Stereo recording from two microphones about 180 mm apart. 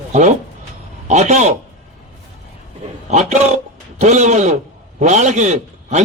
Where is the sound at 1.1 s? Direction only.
40° right (ahead or behind).